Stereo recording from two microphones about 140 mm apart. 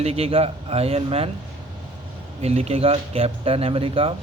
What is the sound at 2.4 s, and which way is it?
A man's voice, 45° right (ahead or behind).